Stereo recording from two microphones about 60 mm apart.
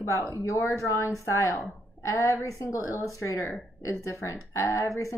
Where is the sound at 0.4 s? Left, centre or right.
Left.